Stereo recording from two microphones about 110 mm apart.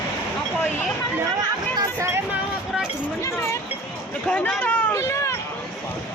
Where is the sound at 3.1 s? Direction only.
25° left (ahead or behind).